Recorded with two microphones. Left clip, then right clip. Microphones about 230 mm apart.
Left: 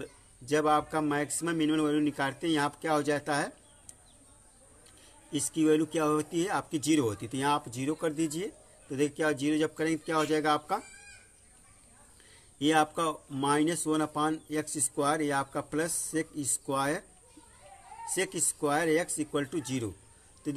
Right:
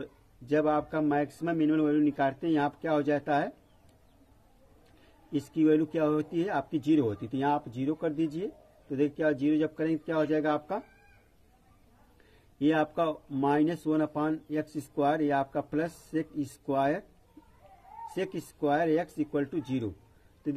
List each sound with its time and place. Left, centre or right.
0.0 s speech: centre
5.5 s speech: centre
12.5 s speech: centre
18.1 s speech: centre